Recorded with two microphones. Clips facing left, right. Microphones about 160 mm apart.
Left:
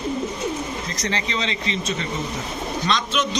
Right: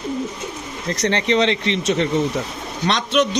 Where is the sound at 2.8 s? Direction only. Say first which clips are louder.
Right 6 dB; 65° right (ahead or behind).